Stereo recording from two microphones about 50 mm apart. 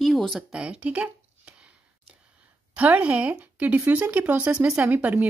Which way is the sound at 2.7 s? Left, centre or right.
Right.